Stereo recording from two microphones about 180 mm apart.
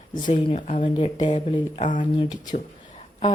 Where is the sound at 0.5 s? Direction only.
40° left (ahead or behind).